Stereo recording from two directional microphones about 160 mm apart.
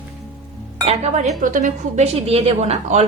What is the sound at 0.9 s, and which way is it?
Speech, 40° right (ahead or behind).